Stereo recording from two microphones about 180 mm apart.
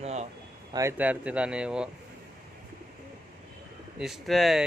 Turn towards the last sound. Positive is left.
turn(degrees=0)  # may be behind; listen again after turning